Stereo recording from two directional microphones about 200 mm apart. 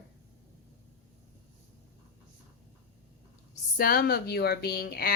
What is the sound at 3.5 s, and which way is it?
Speech, 45° left (ahead or behind).